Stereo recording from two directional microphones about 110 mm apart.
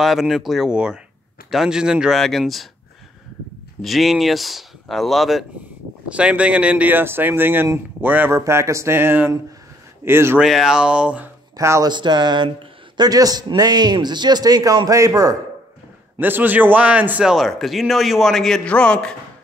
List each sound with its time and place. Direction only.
0.0 s speech: centre (ahead or behind)
3.8 s speech: centre (ahead or behind)
6.0 s speech: 10° right (ahead or behind)
8.4 s speech: 25° right (ahead or behind)
10.4 s speech: 5° right (ahead or behind)
11.5 s speech: 30° right (ahead or behind)
11.9 s a sound: 45° right (ahead or behind)
12.4 s a man's voice: 45° right (ahead or behind); by 15.3 s 30° right (ahead or behind)
16.2 s speech: 15° right (ahead or behind); by 19.1 s 10° left (ahead or behind)